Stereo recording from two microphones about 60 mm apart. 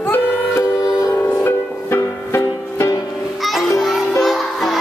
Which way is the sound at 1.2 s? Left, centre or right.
Left.